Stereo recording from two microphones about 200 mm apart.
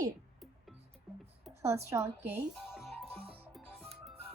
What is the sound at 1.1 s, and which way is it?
Music, centre (ahead or behind).